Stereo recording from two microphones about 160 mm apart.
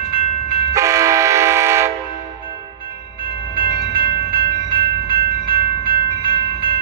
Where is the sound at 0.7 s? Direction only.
20° right (ahead or behind).